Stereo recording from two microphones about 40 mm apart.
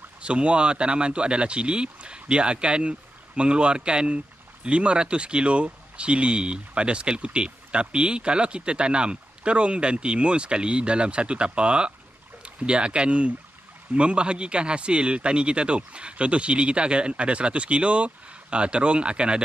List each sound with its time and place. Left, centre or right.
0.2 s speech: right